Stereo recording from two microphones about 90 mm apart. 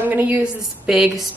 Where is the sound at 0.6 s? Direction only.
5° right (ahead or behind).